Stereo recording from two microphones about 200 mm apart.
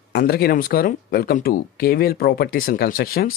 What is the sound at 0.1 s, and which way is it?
A man's voice, 50° left (ahead or behind).